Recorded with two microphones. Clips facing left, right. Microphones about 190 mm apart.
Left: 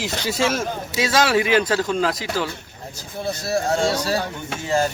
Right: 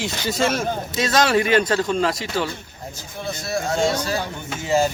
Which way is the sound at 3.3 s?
35° left (ahead or behind).